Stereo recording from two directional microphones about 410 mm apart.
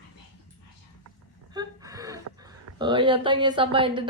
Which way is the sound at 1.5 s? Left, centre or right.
Centre.